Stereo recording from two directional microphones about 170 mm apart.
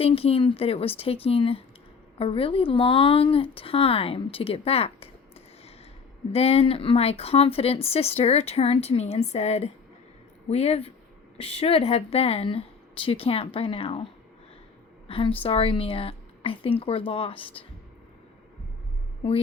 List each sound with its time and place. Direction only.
0.0 s speech: 35° left (ahead or behind)
6.3 s a woman's voice: 35° left (ahead or behind)